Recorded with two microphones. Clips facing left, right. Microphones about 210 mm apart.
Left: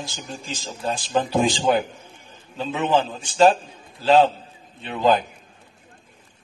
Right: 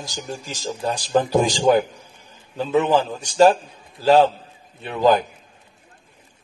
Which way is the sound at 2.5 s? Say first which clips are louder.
Right 3 dB; 40° right (ahead or behind).